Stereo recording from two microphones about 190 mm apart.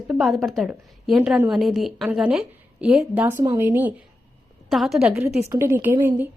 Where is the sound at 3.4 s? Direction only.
20° right (ahead or behind).